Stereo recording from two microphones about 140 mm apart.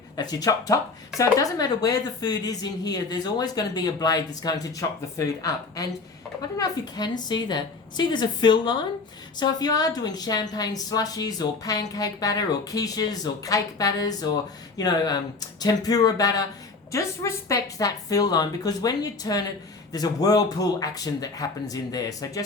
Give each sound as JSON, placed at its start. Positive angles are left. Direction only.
{"t": 0.2, "sound": "a woman's voice", "side_deg": 25}